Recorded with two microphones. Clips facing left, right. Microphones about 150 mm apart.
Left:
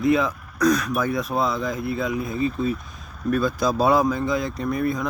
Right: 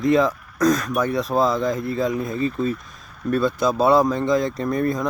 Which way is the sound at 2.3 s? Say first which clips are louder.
Right 1 dB; 5° left (ahead or behind).